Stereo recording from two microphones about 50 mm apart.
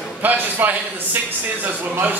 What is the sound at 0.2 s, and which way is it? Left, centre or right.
A man's voice, right.